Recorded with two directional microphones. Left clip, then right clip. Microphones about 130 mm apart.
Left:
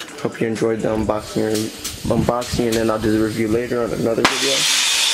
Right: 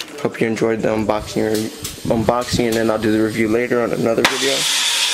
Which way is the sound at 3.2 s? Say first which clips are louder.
Right 2 dB; 35° right (ahead or behind).